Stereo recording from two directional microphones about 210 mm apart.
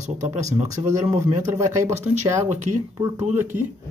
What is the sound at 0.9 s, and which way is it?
Speech, 15° right (ahead or behind).